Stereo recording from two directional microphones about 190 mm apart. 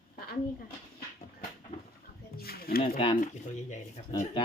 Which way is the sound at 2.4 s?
50° left (ahead or behind).